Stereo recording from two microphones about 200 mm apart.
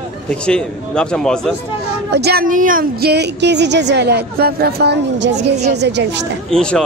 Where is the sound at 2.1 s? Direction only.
55° right (ahead or behind).